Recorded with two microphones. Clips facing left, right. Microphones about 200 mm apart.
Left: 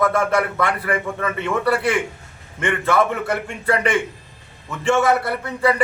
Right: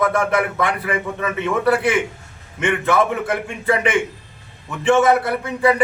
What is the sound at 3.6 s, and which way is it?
A man's voice, 20° right (ahead or behind).